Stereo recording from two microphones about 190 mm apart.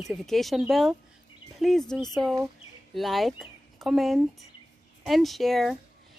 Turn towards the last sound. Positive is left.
turn(degrees=0)  # may be behind; listen again after turning